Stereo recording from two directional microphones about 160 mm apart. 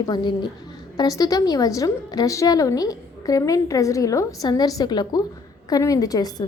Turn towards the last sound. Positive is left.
turn(degrees=25)  # may be behind; listen again after turning